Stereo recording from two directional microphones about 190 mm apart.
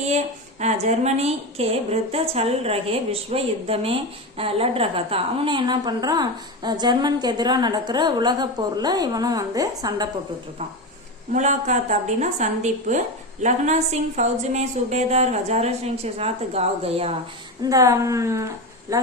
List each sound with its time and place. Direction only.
0.6 s a woman's voice: 35° right (ahead or behind); by 10.1 s 20° right (ahead or behind)
11.3 s a woman's voice: 40° right (ahead or behind)
17.6 s a woman's voice: 20° right (ahead or behind)